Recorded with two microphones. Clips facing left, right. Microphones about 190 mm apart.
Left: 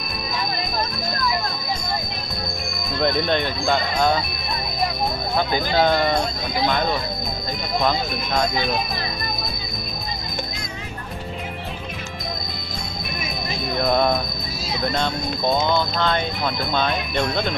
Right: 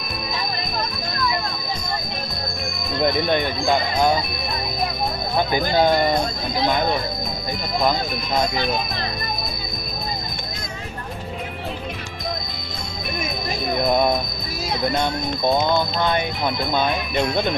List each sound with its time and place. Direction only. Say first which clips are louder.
3.0 s speech: right 1 dB; 10° right (ahead or behind)
5.5 s speech: right 1 dB; 15° right (ahead or behind)
15.0 s speech: right 1 dB; 15° right (ahead or behind)